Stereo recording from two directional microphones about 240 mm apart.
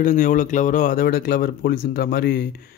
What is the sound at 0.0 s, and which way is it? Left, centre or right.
Speech, left.